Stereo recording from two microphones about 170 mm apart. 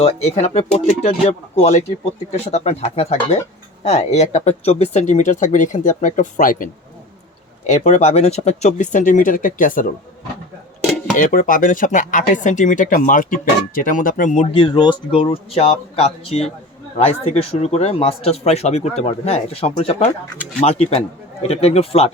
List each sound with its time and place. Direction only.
0.0 s speech: 40° left (ahead or behind)
7.7 s speech: 40° left (ahead or behind)
11.2 s speech: 55° left (ahead or behind); by 22.1 s 35° left (ahead or behind)